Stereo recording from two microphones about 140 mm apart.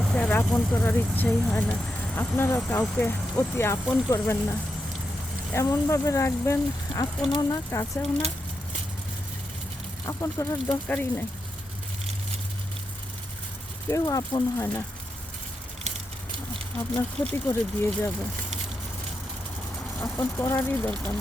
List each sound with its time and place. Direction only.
0.0 s speech: 5° left (ahead or behind)
10.1 s speech: 25° left (ahead or behind)
10.8 s speech: 15° left (ahead or behind)
13.8 s speech: 25° left (ahead or behind)
17.3 s speech: 20° left (ahead or behind)
20.0 s speech: 15° left (ahead or behind)